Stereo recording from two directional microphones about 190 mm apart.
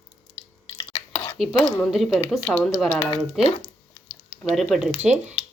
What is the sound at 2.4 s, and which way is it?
Speech, 10° left (ahead or behind).